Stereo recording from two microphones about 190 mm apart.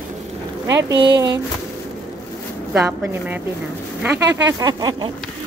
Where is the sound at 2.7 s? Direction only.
10° right (ahead or behind).